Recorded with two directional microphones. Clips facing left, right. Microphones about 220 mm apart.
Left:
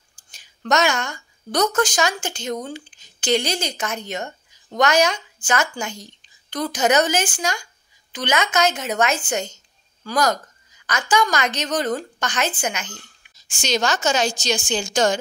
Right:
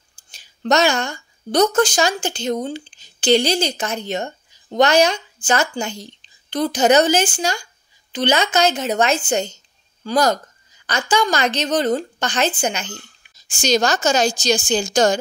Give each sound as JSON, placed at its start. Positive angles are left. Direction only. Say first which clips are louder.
{"t": 0.1, "sound": "a woman's voice", "louder": "right 2 dB", "side_deg": -30}